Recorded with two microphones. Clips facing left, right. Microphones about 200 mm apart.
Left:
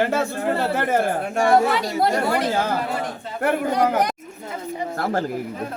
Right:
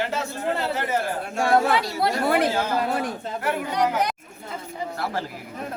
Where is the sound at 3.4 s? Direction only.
50° left (ahead or behind).